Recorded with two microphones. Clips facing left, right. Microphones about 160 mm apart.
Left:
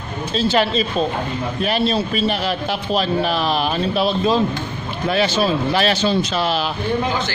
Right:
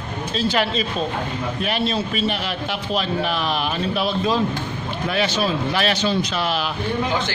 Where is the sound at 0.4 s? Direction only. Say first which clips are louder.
Left 4 dB; 30° left (ahead or behind).